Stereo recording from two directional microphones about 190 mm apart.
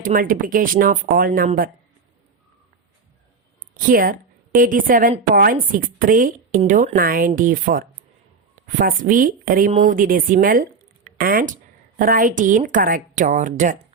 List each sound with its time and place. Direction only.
0.0 s speech: 45° right (ahead or behind)
3.8 s a woman's voice: 45° right (ahead or behind)